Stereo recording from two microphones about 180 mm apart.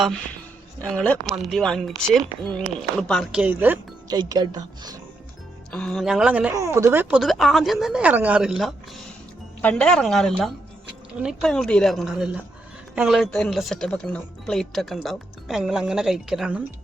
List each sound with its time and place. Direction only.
0.0 s speech: 5° left (ahead or behind)
3.4 s speech: 10° right (ahead or behind)
4.1 s a woman's voice: 20° right (ahead or behind)
5.7 s speech: centre (ahead or behind)